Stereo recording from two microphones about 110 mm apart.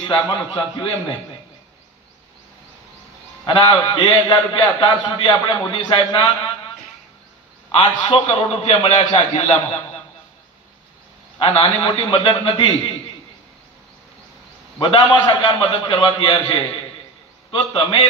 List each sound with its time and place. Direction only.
0.7 s a man's voice: 50° left (ahead or behind)
3.4 s a man's voice: 50° left (ahead or behind)
7.7 s a man's voice: 50° left (ahead or behind)
8.5 s a man's voice: 70° left (ahead or behind)
11.3 s a man's voice: 50° left (ahead or behind)
14.8 s a man's voice: 45° left (ahead or behind)